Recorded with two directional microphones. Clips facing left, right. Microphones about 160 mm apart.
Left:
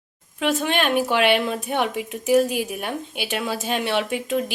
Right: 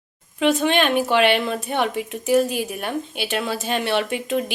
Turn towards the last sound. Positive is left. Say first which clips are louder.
# right 1 dB
turn(degrees=5)  # may be behind; listen again after turning